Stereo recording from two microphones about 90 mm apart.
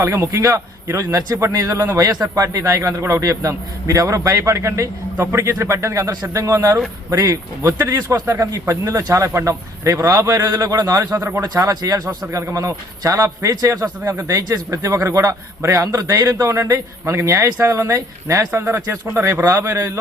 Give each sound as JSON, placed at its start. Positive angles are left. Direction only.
{"t": 0.0, "sound": "a man's voice", "side_deg": -30}
{"t": 11.1, "sound": "a man's voice", "side_deg": -25}
{"t": 11.6, "sound": "speech", "side_deg": -45}
{"t": 12.0, "sound": "a man's voice", "side_deg": -30}
{"t": 14.7, "sound": "a man's voice", "side_deg": -35}